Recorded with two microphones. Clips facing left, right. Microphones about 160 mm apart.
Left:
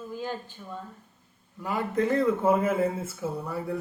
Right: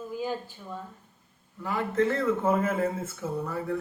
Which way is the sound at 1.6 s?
15° left (ahead or behind).